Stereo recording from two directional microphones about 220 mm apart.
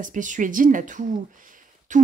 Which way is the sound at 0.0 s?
35° right (ahead or behind).